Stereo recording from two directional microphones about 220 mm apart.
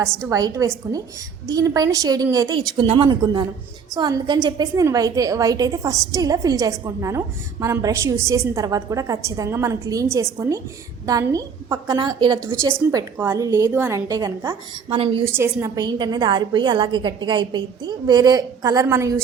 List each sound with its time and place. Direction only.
0.3 s a woman's voice: 15° right (ahead or behind)
15.3 s a woman's voice: 10° right (ahead or behind)